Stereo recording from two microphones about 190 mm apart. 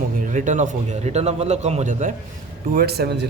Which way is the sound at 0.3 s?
40° right (ahead or behind).